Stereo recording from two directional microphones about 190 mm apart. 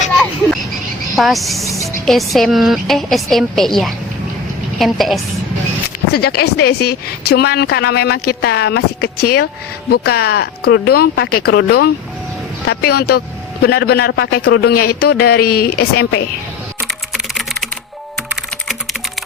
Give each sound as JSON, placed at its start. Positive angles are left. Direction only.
{"t": 1.1, "sound": "a woman's voice", "side_deg": 0}
{"t": 6.1, "sound": "speech", "side_deg": 55}
{"t": 17.1, "sound": "typing", "side_deg": 0}